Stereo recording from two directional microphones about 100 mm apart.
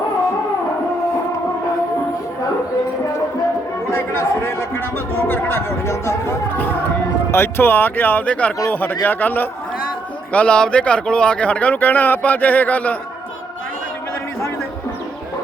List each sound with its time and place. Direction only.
3.9 s a sound: 25° left (ahead or behind)
5.3 s speech: 25° left (ahead or behind)
7.3 s a man's voice: 25° left (ahead or behind)